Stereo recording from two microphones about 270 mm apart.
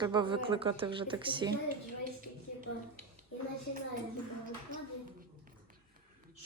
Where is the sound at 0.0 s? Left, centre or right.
Centre.